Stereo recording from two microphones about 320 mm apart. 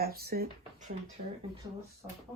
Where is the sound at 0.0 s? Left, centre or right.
Right.